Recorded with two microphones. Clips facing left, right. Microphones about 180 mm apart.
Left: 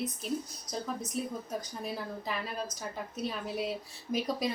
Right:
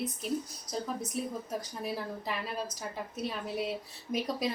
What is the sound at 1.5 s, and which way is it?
Speech, 5° right (ahead or behind).